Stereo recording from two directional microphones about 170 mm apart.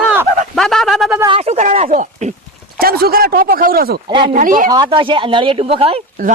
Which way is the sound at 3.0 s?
60° right (ahead or behind).